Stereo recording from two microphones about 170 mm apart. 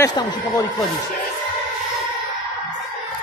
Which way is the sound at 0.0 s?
25° left (ahead or behind).